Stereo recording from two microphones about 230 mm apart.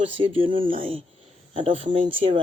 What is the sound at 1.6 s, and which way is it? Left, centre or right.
Speech, right.